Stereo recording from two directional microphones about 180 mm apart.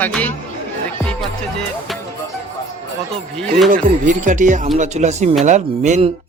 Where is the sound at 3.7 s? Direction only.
45° right (ahead or behind).